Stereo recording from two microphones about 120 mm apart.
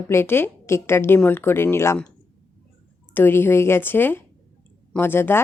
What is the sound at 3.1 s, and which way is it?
A woman's voice, 15° left (ahead or behind).